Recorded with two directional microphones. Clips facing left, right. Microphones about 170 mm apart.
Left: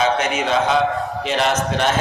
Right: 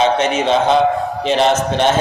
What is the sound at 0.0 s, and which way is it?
A man's voice, 25° right (ahead or behind).